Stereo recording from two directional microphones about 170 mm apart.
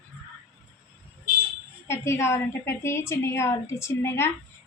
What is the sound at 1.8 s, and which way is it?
A woman's voice, 15° left (ahead or behind).